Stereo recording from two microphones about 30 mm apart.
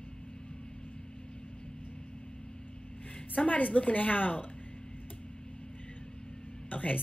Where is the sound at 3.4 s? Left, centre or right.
Left.